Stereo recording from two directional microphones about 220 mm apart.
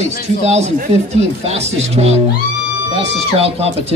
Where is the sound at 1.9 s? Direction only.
30° right (ahead or behind).